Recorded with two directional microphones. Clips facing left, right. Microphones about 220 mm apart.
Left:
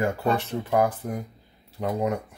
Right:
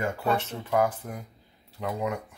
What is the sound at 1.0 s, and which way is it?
Speech, 35° left (ahead or behind).